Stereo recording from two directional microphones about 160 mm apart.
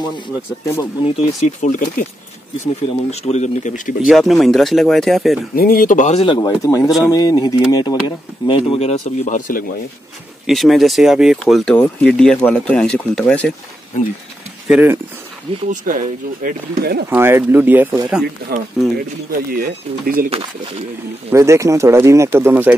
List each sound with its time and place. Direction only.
1.0 s speech: 40° left (ahead or behind)
2.6 s speech: 45° left (ahead or behind)
4.1 s speech: centre (ahead or behind)
5.6 s speech: 65° left (ahead or behind)
6.2 s speech: 25° left (ahead or behind)
6.8 s speech: centre (ahead or behind)
7.1 s speech: 25° left (ahead or behind); by 9.7 s 55° left (ahead or behind)
10.4 s speech: centre (ahead or behind)
14.7 s speech: 10° right (ahead or behind)
15.7 s speech: 55° right (ahead or behind)
16.4 s speech: 70° right (ahead or behind)
17.1 s speech: 15° right (ahead or behind)
19.5 s speech: 65° right (ahead or behind)
21.3 s speech: 20° right (ahead or behind)